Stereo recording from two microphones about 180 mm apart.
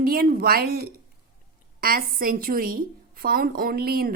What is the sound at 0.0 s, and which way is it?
A woman's voice, 55° right (ahead or behind).